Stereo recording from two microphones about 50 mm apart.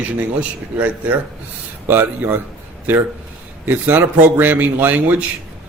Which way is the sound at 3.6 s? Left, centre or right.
Right.